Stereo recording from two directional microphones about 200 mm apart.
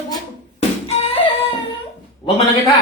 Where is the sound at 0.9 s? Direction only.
30° left (ahead or behind).